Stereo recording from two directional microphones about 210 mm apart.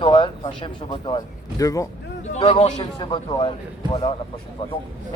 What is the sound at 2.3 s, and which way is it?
Speech, 30° left (ahead or behind).